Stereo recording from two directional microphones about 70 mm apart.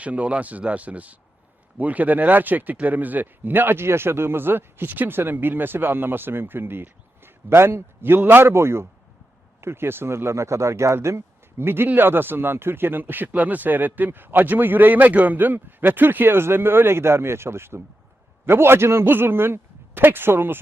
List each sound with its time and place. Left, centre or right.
0.0 s a man's voice: centre